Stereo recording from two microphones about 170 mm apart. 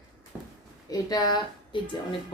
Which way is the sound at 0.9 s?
25° left (ahead or behind).